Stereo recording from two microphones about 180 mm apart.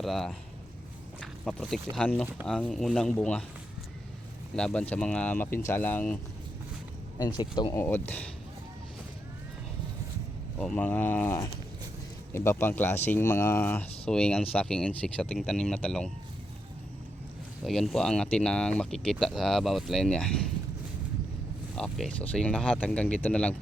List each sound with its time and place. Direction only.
0.0 s speech: centre (ahead or behind)
4.5 s speech: 5° left (ahead or behind)
7.2 s speech: 25° left (ahead or behind)
7.7 s speech: 15° left (ahead or behind)
10.6 s speech: 5° left (ahead or behind)
17.6 s speech: centre (ahead or behind)
21.8 s speech: 5° left (ahead or behind)